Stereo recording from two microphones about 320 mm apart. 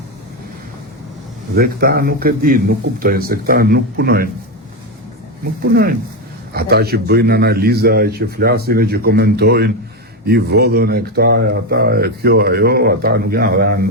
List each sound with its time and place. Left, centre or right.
1.5 s speech: right
6.5 s speech: right